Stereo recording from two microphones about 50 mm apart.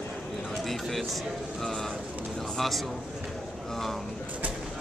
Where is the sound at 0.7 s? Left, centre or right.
Centre.